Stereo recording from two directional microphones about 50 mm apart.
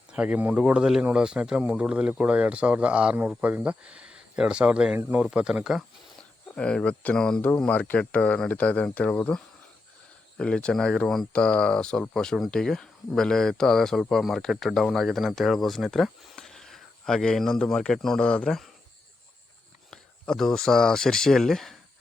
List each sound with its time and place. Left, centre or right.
0.1 s speech: right
0.5 s speech: centre
6.6 s speech: centre
7.7 s speech: left; by 11.3 s centre
11.3 s speech: left
14.1 s speech: centre
18.3 s speech: left
19.9 s speech: centre